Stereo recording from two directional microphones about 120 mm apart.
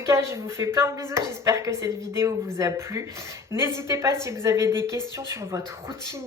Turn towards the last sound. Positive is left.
turn(degrees=-25)  # may be behind; listen again after turning